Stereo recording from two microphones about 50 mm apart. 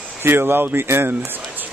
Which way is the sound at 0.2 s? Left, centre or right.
Right.